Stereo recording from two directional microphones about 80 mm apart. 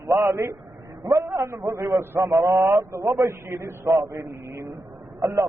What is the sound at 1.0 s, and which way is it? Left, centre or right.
Speech, right.